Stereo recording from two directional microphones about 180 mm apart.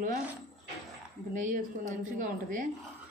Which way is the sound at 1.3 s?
45° right (ahead or behind).